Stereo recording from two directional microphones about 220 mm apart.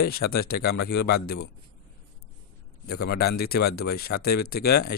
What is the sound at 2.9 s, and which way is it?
Speech, 45° left (ahead or behind).